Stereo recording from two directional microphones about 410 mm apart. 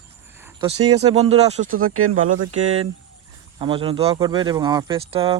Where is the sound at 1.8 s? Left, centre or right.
Right.